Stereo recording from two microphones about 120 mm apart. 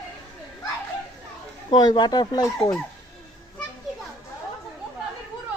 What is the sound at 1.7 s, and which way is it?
Speech, 35° left (ahead or behind).